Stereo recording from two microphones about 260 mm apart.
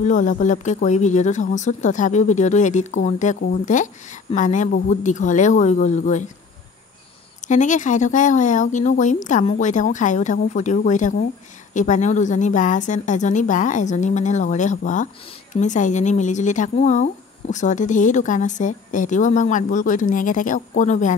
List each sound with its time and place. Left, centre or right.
0.0 s speech: left
7.4 s speech: left